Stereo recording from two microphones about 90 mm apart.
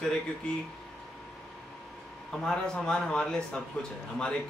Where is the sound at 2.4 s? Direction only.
5° left (ahead or behind).